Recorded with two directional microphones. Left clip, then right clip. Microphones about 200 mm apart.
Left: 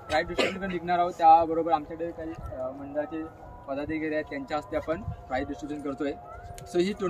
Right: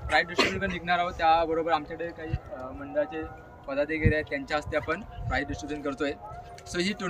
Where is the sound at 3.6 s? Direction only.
Centre (ahead or behind).